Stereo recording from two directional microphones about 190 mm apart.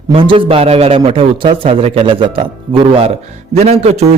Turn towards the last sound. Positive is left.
turn(degrees=-35)  # may be behind; listen again after turning